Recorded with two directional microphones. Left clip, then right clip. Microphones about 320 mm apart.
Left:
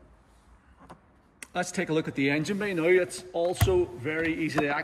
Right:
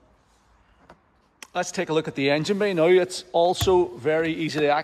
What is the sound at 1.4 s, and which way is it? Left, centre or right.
Speech, centre.